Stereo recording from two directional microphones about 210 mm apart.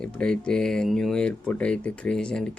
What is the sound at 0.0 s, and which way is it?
Speech, 5° left (ahead or behind).